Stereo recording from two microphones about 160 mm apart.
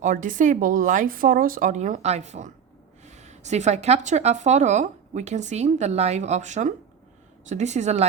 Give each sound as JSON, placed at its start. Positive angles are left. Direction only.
{"t": 0.0, "sound": "a woman's voice", "side_deg": -55}